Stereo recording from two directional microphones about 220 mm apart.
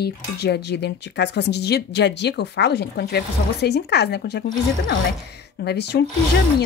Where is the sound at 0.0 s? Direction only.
50° left (ahead or behind).